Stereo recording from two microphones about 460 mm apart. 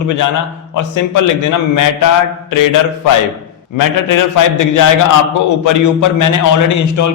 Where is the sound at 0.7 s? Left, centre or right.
Left.